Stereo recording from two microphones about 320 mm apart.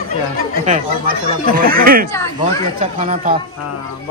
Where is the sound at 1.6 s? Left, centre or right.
Right.